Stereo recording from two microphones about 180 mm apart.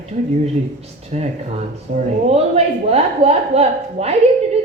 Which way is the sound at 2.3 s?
35° right (ahead or behind).